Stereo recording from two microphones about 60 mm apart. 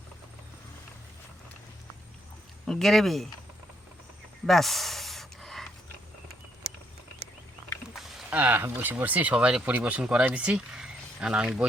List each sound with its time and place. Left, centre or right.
2.6 s speech: centre
4.4 s a sound: centre
7.9 s rowboat: centre
8.3 s speech: right